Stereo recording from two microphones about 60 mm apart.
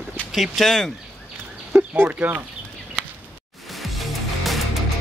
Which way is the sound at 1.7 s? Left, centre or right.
Right.